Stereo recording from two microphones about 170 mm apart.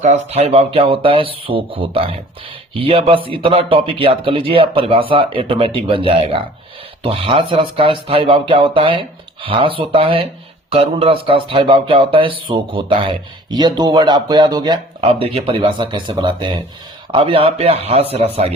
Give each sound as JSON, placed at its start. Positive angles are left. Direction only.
{"t": 0.0, "sound": "speech", "side_deg": -40}